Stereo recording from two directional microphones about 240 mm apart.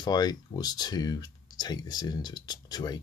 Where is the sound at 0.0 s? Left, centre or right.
Centre.